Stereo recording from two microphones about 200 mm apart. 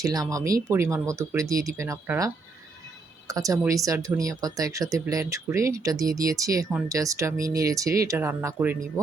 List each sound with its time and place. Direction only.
0.0 s speech: 20° right (ahead or behind)